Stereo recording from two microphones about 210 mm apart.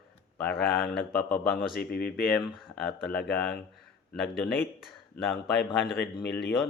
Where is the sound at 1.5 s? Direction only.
45° left (ahead or behind).